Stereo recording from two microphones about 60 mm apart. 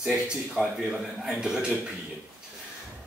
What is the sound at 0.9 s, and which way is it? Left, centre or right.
Speech, centre.